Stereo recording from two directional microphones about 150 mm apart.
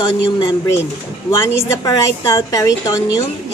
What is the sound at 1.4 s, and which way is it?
A woman's voice, 25° left (ahead or behind).